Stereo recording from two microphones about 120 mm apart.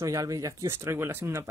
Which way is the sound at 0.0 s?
30° right (ahead or behind).